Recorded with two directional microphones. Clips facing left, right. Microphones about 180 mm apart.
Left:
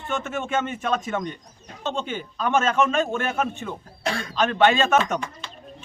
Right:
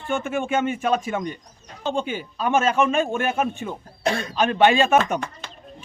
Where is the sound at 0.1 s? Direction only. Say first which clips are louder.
Right 3 dB; 10° right (ahead or behind).